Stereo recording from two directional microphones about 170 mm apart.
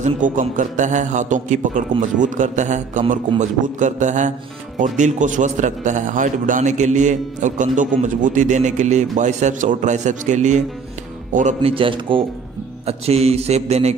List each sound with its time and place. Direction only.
0.0 s a man's voice: 45° right (ahead or behind)
11.7 s speech: 30° right (ahead or behind)